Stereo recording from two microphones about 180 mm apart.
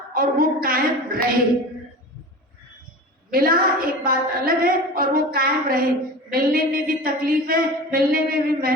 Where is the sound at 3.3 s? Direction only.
55° right (ahead or behind).